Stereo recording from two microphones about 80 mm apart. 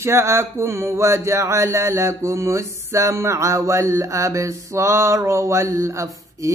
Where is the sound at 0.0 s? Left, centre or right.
Right.